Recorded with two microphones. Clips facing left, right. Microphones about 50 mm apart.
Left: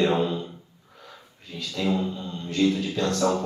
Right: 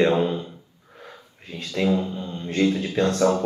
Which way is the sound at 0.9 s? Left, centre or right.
Right.